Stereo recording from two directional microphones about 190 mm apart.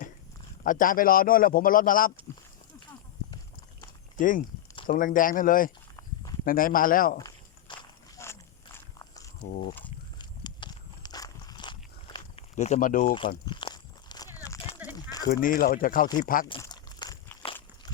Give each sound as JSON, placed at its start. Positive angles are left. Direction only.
{"t": 0.6, "sound": "speech", "side_deg": 45}
{"t": 4.2, "sound": "speech", "side_deg": 45}
{"t": 7.7, "sound": "walk", "side_deg": 25}
{"t": 8.2, "sound": "biting", "side_deg": 15}
{"t": 10.2, "sound": "a sound", "side_deg": 20}
{"t": 12.5, "sound": "speech", "side_deg": 40}
{"t": 13.4, "sound": "walk", "side_deg": 25}
{"t": 15.3, "sound": "speech", "side_deg": 50}
{"t": 16.6, "sound": "crunch", "side_deg": 20}